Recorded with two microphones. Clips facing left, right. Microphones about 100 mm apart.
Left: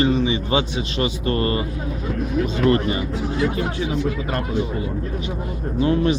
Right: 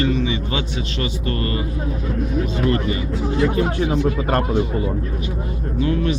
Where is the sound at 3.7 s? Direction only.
50° right (ahead or behind).